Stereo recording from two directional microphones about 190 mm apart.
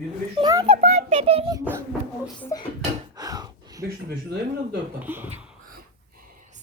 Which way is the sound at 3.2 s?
20° right (ahead or behind).